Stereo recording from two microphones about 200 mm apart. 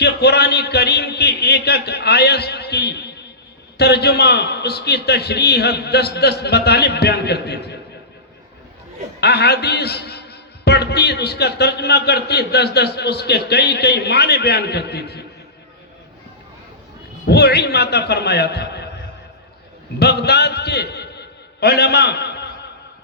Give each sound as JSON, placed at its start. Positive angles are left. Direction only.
{"t": 0.0, "sound": "a sound", "side_deg": 55}
{"t": 3.8, "sound": "a man's voice", "side_deg": 55}
{"t": 9.2, "sound": "a man's voice", "side_deg": 55}
{"t": 17.2, "sound": "a man's voice", "side_deg": 55}
{"t": 20.0, "sound": "a man's voice", "side_deg": 55}